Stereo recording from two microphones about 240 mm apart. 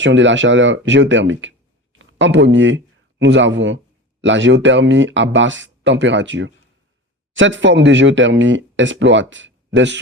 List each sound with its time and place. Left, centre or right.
0.0 s speech: right